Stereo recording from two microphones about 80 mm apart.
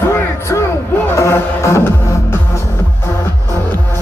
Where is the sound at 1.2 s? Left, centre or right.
Left.